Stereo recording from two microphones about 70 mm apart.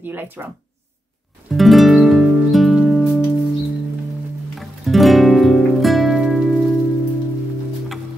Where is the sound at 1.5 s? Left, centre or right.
Centre.